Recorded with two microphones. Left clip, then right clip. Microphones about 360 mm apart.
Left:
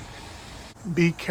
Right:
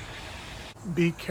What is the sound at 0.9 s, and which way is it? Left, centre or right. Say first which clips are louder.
Speech: left 3 dB; left.